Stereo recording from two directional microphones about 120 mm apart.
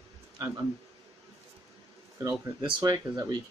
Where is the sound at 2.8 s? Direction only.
30° right (ahead or behind).